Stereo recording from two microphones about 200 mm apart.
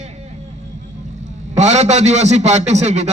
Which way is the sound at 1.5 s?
35° right (ahead or behind).